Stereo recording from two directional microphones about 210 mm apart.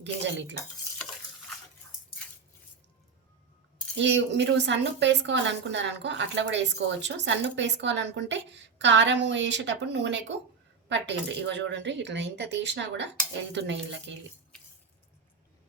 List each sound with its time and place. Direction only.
0.0 s a woman's voice: 55° right (ahead or behind)
3.9 s a woman's voice: 55° right (ahead or behind)